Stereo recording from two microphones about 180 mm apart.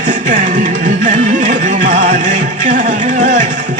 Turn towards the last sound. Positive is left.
turn(degrees=-45)  # may be behind; listen again after turning